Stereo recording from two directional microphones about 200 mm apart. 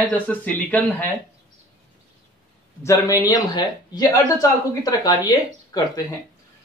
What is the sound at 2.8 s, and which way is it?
A man's voice, 15° left (ahead or behind).